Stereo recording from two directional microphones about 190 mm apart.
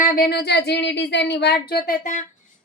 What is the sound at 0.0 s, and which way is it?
A woman's voice, 50° left (ahead or behind).